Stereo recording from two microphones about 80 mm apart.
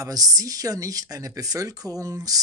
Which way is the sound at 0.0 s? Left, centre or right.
Right.